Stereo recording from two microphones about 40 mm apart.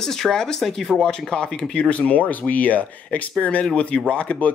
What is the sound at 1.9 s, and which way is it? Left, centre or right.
Speech, left.